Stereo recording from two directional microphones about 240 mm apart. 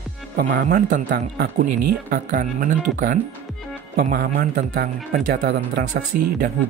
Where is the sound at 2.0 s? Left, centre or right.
Right.